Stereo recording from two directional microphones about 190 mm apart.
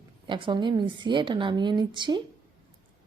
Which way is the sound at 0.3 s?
25° right (ahead or behind).